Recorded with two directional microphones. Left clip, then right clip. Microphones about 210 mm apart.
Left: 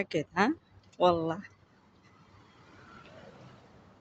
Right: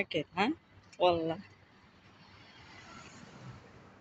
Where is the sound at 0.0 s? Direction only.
15° left (ahead or behind).